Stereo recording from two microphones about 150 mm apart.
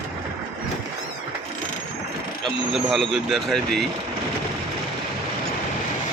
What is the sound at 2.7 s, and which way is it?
Speech, centre (ahead or behind).